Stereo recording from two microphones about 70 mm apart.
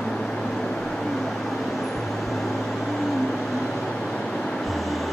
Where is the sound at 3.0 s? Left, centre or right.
Centre.